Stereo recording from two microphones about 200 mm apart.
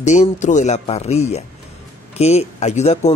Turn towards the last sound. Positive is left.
turn(degrees=35)  # may be behind; listen again after turning